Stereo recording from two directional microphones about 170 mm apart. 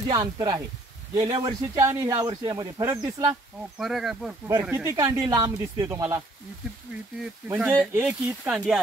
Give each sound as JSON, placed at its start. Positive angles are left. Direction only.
{"t": 0.1, "sound": "speech", "side_deg": -20}
{"t": 3.7, "sound": "speech", "side_deg": 0}
{"t": 4.5, "sound": "speech", "side_deg": -15}
{"t": 7.4, "sound": "speech", "side_deg": -10}